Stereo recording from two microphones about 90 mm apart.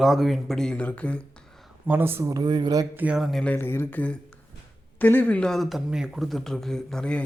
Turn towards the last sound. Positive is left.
turn(degrees=10)  # may be behind; listen again after turning